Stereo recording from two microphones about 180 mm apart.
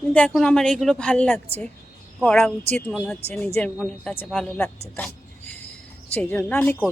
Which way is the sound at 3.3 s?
10° left (ahead or behind).